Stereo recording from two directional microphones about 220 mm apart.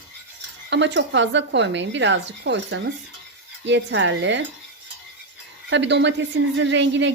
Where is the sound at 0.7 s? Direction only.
55° right (ahead or behind).